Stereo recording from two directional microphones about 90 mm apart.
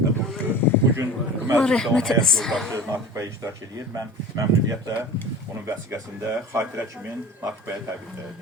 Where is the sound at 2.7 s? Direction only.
35° right (ahead or behind).